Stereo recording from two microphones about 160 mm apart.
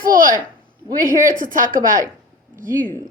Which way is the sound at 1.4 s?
55° right (ahead or behind).